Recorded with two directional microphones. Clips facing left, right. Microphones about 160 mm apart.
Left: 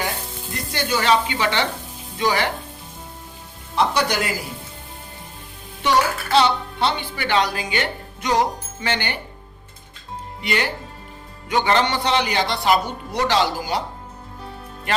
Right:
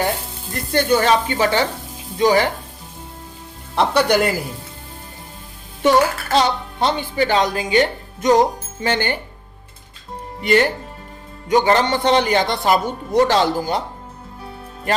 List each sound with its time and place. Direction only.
0.7 s a man's voice: 45° right (ahead or behind)
3.8 s speech: 55° right (ahead or behind)
5.8 s a man's voice: 45° right (ahead or behind)
10.4 s a man's voice: 45° right (ahead or behind)